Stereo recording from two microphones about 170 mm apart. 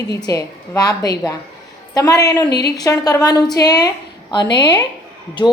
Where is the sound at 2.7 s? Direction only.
20° left (ahead or behind).